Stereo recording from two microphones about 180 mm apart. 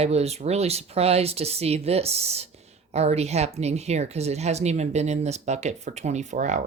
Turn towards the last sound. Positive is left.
turn(degrees=-40)  # may be behind; listen again after turning